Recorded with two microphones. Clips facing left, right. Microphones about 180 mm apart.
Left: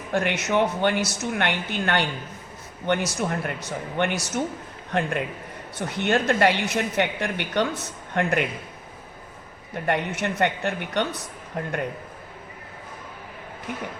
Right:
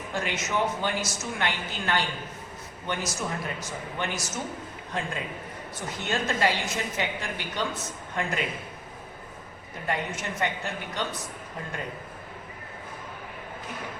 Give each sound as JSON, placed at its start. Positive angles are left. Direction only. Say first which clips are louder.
{"t": 0.1, "sound": "a woman's voice", "louder": "left 7 dB", "side_deg": 65}
{"t": 9.8, "sound": "a woman's voice", "louder": "left 6 dB", "side_deg": 65}